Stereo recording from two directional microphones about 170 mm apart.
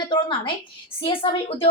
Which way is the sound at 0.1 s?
30° left (ahead or behind).